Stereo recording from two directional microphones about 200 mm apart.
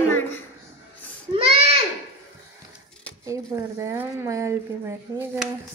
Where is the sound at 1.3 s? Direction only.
30° right (ahead or behind).